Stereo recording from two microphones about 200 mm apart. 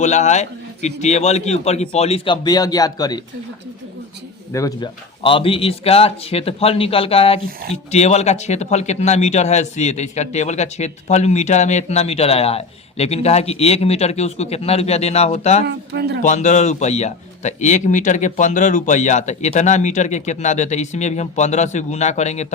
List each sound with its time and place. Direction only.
0.0 s a man's voice: 35° left (ahead or behind); by 3.2 s 20° left (ahead or behind)
4.5 s a man's voice: 20° left (ahead or behind)
15.6 s speech: 55° right (ahead or behind)
16.2 s a man's voice: 35° left (ahead or behind)